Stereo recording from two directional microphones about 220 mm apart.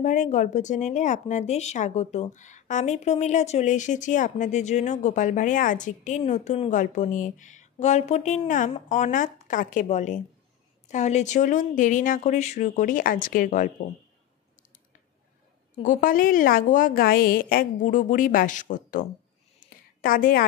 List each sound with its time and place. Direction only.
0.0 s speech: 35° left (ahead or behind)
15.7 s speech: 35° left (ahead or behind)